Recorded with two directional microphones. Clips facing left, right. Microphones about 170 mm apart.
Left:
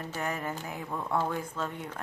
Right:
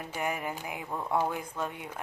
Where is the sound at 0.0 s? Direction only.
15° right (ahead or behind).